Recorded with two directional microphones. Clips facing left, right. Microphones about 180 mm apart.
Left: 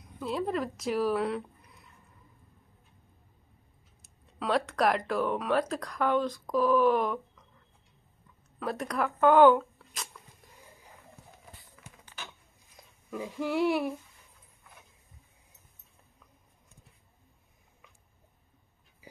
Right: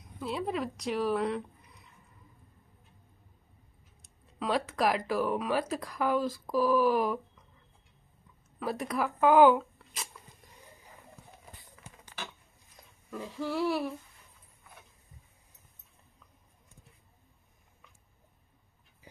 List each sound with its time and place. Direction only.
0.2 s speech: centre (ahead or behind)
4.0 s speech: centre (ahead or behind)
8.5 s speech: centre (ahead or behind)
13.1 s female singing: 15° left (ahead or behind)